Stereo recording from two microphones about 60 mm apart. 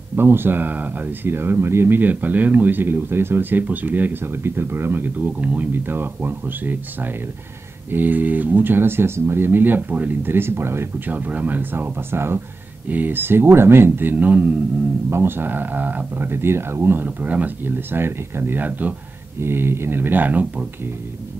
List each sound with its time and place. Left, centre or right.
0.1 s speech: right
5.7 s speech: right
11.1 s speech: right
15.0 s speech: right
19.4 s speech: right